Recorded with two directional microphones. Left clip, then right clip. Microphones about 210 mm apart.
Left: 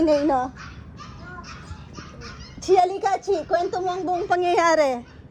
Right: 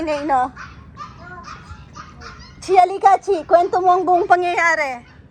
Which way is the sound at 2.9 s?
25° right (ahead or behind).